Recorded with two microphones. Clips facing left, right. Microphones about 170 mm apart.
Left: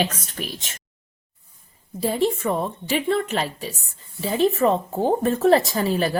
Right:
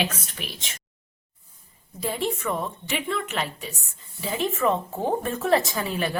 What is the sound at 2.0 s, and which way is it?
Speech, 35° left (ahead or behind).